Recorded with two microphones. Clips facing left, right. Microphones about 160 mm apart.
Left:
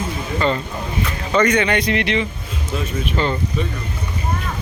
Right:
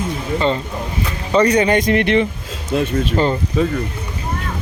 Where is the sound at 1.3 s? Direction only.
35° right (ahead or behind).